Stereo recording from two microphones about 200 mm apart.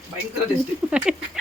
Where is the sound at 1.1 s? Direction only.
5° right (ahead or behind).